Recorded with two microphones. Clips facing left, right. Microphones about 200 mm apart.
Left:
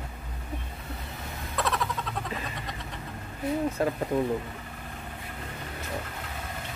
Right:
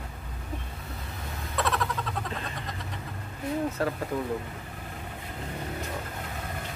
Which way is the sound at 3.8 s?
15° left (ahead or behind).